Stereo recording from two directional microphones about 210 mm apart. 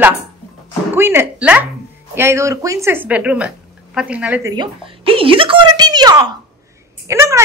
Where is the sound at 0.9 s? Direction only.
10° right (ahead or behind).